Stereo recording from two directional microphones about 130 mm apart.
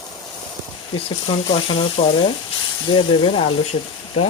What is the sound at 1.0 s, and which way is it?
Speech, 45° left (ahead or behind).